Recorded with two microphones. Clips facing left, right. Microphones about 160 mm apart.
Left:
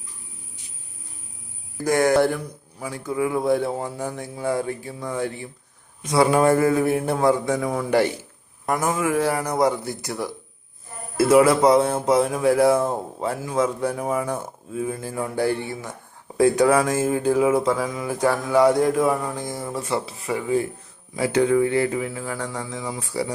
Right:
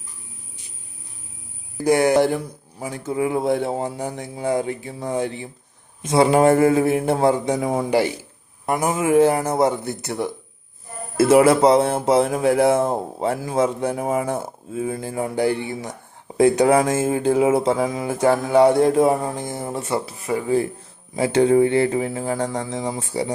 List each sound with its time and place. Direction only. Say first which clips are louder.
1.8 s speech: right 2 dB; 20° right (ahead or behind)
7.9 s speech: even; 10° right (ahead or behind); by 23.3 s 25° right (ahead or behind)